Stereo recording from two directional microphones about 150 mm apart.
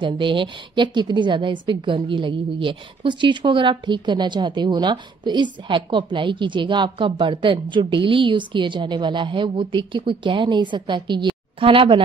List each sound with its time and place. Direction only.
0.0 s a woman's voice: 35° right (ahead or behind)